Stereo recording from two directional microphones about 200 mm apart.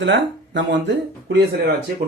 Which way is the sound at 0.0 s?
60° right (ahead or behind).